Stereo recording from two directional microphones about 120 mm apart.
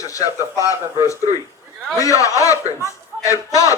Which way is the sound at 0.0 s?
30° left (ahead or behind).